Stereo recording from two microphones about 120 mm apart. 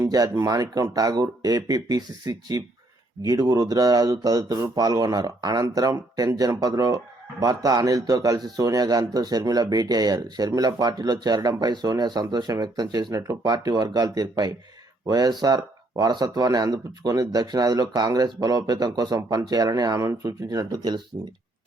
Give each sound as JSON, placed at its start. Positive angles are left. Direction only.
{"t": 0.0, "sound": "speech", "side_deg": -30}